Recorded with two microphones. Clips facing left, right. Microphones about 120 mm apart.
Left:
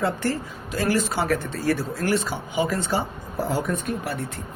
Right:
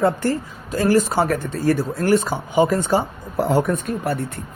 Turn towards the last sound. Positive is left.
turn(degrees=-60)  # may be behind; listen again after turning